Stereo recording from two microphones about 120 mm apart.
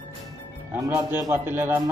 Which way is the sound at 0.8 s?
25° right (ahead or behind).